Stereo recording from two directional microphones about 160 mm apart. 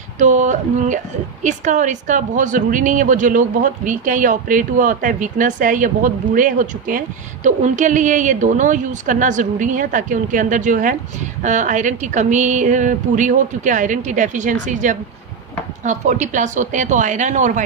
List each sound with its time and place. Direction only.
0.2 s a woman's voice: 50° right (ahead or behind)